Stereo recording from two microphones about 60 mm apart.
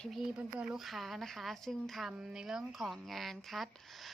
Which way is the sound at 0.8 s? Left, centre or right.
Centre.